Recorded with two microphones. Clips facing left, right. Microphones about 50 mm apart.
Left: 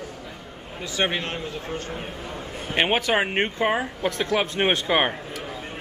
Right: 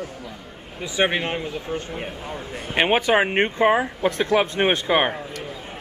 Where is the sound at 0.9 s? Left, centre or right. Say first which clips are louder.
Right 4 dB; centre.